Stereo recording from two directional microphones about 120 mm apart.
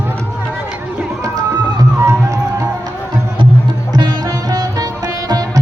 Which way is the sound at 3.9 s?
30° right (ahead or behind).